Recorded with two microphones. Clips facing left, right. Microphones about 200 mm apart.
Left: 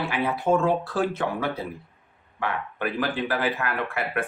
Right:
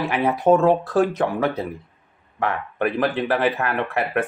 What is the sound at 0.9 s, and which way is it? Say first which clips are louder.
A man's voice: right 6 dB; 40° right (ahead or behind).